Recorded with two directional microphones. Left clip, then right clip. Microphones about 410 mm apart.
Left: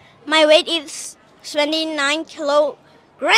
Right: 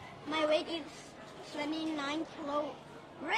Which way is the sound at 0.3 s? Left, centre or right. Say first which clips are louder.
Left 19 dB; left.